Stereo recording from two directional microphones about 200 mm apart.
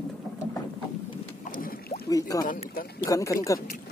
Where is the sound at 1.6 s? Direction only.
45° left (ahead or behind).